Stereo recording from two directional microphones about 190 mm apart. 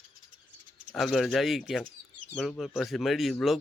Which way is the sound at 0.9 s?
Centre (ahead or behind).